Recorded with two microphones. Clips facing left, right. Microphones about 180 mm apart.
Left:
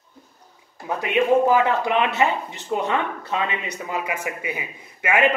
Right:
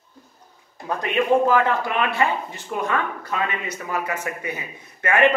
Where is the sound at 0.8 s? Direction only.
10° left (ahead or behind).